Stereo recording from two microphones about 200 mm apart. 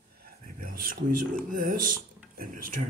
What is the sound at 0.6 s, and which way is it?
Speech, 45° right (ahead or behind).